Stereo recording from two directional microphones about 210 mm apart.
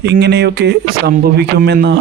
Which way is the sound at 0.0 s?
50° right (ahead or behind).